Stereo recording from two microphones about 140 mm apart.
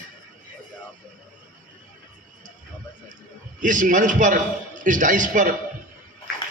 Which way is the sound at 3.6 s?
65° right (ahead or behind).